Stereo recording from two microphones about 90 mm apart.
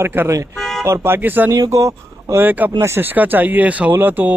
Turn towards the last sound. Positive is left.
turn(degrees=-20)  # may be behind; listen again after turning